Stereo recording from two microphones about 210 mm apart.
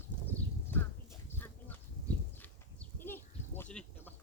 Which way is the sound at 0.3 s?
10° left (ahead or behind).